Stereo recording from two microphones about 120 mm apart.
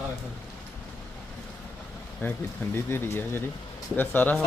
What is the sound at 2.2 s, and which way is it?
Speech, 20° left (ahead or behind).